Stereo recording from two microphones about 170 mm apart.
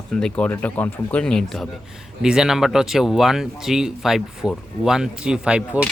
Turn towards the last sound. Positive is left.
turn(degrees=-5)  # may be behind; listen again after turning